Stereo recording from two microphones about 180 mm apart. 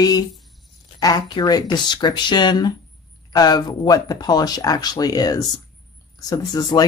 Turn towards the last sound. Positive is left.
turn(degrees=20)  # may be behind; listen again after turning